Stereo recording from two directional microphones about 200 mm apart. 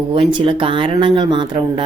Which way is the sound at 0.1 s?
25° right (ahead or behind).